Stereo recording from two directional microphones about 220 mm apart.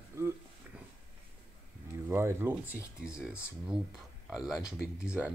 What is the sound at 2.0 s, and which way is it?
Speech, 10° right (ahead or behind).